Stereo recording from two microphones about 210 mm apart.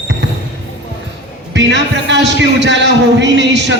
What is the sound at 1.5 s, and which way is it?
Speech, 55° right (ahead or behind).